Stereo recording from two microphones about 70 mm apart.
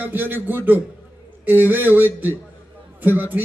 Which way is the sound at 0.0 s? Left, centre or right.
Right.